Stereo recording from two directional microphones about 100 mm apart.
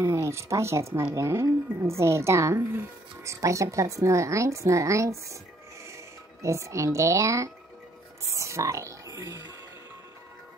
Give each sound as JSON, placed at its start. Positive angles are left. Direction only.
{"t": 0.0, "sound": "a woman's voice", "side_deg": -25}
{"t": 6.4, "sound": "a woman's voice", "side_deg": -30}